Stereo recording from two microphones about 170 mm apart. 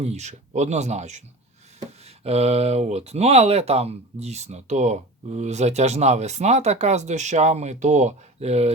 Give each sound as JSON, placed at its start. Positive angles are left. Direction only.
{"t": 0.0, "sound": "speech", "side_deg": -40}